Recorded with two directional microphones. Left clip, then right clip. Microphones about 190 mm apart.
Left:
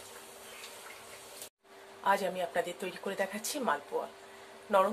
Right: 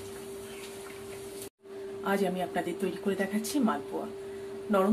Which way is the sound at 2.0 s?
20° left (ahead or behind).